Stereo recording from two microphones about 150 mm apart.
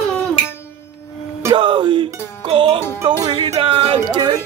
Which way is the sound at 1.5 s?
30° right (ahead or behind).